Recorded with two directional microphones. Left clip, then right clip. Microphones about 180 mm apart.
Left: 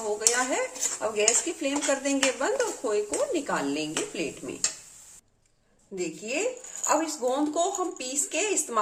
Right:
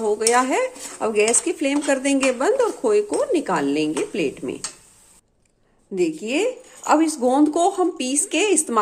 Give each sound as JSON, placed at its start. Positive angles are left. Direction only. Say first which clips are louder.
{"t": 0.2, "sound": "speech", "louder": "right 7 dB", "side_deg": -40}
{"t": 6.0, "sound": "speech", "louder": "right 9 dB", "side_deg": -50}